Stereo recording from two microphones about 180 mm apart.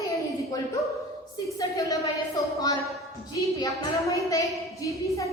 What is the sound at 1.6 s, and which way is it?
Speech, 20° left (ahead or behind).